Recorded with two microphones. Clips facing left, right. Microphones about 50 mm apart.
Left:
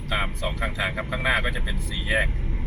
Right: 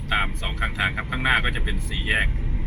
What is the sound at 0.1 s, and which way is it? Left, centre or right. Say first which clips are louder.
Speech: right 2 dB; right.